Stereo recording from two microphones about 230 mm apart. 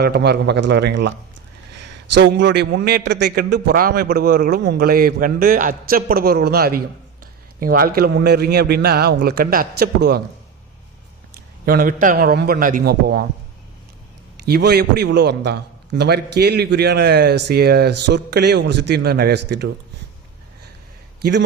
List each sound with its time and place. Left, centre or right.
0.0 s speech: right
2.1 s a man's voice: right
11.6 s a man's voice: right
14.4 s speech: right
21.2 s a man's voice: right